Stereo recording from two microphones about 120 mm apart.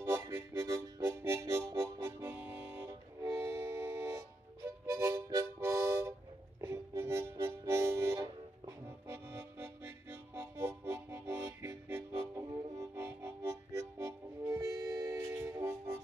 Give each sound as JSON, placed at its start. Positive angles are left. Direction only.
{"t": 0.0, "sound": "harmonica", "side_deg": -20}
{"t": 2.0, "sound": "music", "side_deg": -20}
{"t": 4.6, "sound": "harmonica", "side_deg": -25}